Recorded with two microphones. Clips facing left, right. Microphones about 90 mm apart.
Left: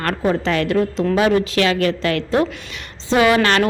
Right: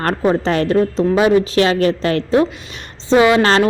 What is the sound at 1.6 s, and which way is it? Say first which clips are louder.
A woman's voice: right 3 dB; 30° right (ahead or behind).